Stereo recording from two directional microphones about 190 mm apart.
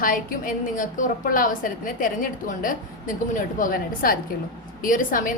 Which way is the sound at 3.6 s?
50° left (ahead or behind).